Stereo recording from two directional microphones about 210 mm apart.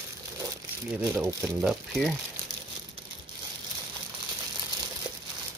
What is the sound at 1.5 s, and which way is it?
Speech, centre (ahead or behind).